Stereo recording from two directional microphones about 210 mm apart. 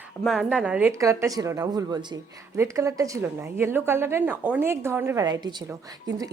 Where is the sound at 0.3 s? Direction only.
5° right (ahead or behind).